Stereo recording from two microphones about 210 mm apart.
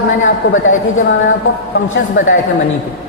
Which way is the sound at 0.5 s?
70° left (ahead or behind).